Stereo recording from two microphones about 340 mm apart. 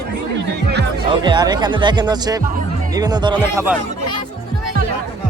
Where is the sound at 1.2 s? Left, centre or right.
Centre.